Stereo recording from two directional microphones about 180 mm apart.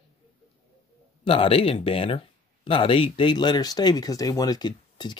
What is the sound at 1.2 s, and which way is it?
Speech, 30° left (ahead or behind).